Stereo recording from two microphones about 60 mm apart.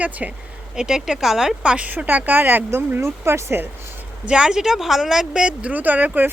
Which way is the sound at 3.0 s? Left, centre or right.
Right.